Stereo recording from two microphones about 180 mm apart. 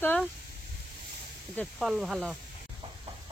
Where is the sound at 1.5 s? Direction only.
Centre (ahead or behind).